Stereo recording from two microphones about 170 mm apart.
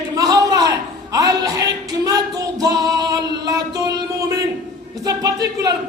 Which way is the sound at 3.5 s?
20° right (ahead or behind).